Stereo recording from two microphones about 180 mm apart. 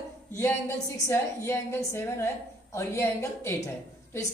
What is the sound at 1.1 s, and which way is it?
A woman's voice, 15° left (ahead or behind).